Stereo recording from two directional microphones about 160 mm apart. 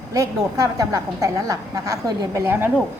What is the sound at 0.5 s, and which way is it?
A woman's voice, 20° right (ahead or behind).